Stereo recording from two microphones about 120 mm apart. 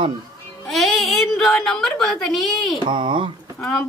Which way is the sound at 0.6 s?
Centre (ahead or behind).